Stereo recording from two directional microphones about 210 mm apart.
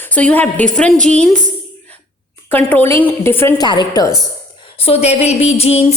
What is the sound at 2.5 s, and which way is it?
A woman's voice, 10° left (ahead or behind).